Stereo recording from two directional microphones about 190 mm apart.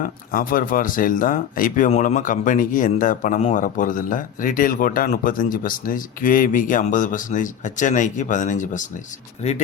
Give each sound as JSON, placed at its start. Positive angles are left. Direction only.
{"t": 0.0, "sound": "speech", "side_deg": 45}